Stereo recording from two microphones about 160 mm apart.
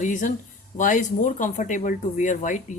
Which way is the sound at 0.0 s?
50° left (ahead or behind).